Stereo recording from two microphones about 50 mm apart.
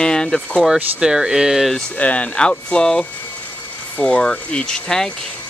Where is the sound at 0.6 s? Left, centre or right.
Centre.